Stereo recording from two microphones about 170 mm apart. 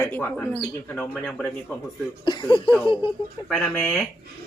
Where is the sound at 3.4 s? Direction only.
5° left (ahead or behind).